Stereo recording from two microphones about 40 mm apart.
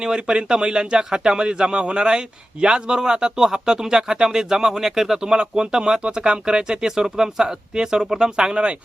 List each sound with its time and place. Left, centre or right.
0.0 s speech: right